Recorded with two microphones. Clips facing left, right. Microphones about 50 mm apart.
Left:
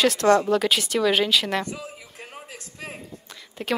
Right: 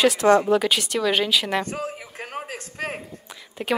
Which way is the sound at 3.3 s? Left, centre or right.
Centre.